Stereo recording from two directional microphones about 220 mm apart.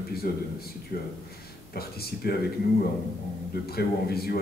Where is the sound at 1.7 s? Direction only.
45° left (ahead or behind).